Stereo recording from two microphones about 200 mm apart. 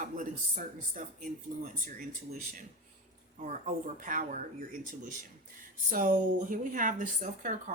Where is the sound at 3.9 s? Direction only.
40° right (ahead or behind).